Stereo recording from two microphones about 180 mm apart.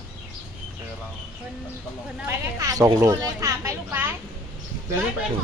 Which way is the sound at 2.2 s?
20° right (ahead or behind).